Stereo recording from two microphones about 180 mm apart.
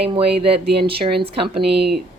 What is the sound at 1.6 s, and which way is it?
Speech, 65° right (ahead or behind).